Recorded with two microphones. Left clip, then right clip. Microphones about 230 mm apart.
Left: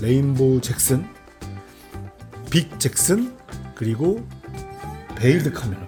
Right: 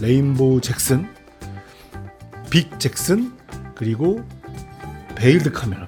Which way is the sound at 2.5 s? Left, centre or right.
Centre.